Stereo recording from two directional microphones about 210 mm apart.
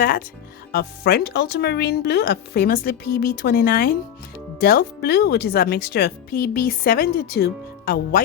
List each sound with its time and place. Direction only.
0.0 s speech: 45° left (ahead or behind)